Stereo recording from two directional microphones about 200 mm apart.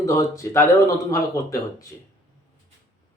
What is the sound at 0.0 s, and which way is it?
A man's voice, 15° left (ahead or behind).